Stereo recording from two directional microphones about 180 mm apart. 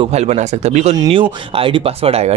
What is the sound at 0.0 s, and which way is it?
Speech, 35° right (ahead or behind).